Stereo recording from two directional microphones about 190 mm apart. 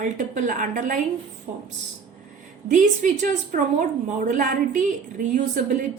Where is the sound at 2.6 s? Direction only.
40° right (ahead or behind).